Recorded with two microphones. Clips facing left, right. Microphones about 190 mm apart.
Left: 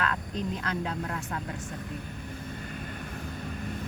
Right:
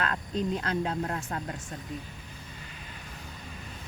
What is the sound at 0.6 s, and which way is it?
Speech, 30° right (ahead or behind).